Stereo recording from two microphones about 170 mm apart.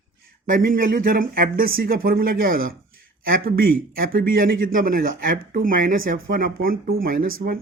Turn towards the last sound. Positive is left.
turn(degrees=-60)  # may be behind; listen again after turning